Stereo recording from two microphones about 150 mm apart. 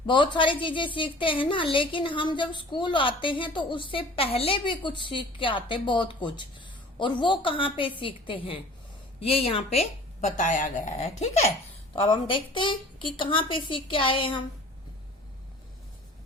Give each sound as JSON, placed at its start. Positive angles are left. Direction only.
{"t": 0.1, "sound": "a woman's voice", "side_deg": 35}
{"t": 12.0, "sound": "a woman's voice", "side_deg": 35}